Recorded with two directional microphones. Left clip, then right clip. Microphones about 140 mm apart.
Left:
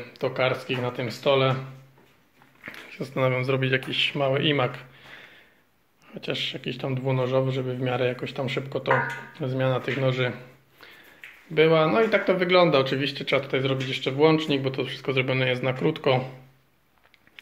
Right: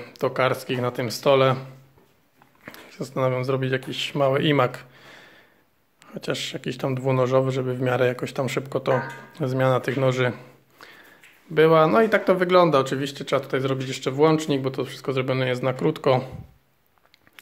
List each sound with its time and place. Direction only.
0.0 s speech: 60° right (ahead or behind)
2.6 s speech: 30° right (ahead or behind); by 10.3 s 55° right (ahead or behind)
11.5 s speech: 50° right (ahead or behind)